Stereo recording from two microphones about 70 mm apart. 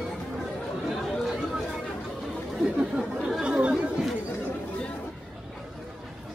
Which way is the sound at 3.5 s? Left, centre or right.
Centre.